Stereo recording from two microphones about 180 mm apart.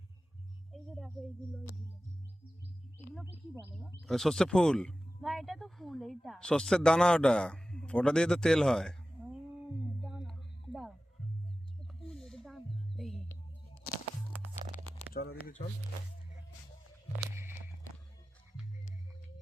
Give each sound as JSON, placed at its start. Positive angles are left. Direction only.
{"t": 0.7, "sound": "music", "side_deg": 0}
{"t": 4.0, "sound": "speech", "side_deg": 0}
{"t": 10.0, "sound": "music", "side_deg": 0}
{"t": 12.0, "sound": "music", "side_deg": 0}
{"t": 15.1, "sound": "speech", "side_deg": 55}
{"t": 17.3, "sound": "walk", "side_deg": -15}